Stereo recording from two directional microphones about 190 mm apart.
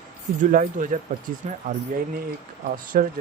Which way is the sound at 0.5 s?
45° right (ahead or behind).